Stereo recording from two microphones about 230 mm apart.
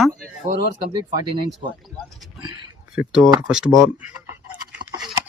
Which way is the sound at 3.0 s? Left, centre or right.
Centre.